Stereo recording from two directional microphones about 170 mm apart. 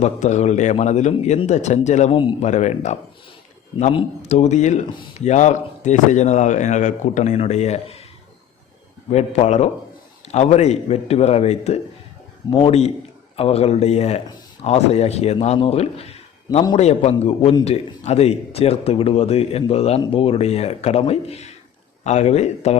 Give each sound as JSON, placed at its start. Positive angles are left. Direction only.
{"t": 0.0, "sound": "speech", "side_deg": 45}
{"t": 9.1, "sound": "a man's voice", "side_deg": 40}